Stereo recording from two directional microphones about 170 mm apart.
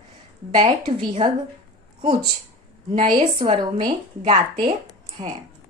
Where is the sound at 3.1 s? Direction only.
35° right (ahead or behind).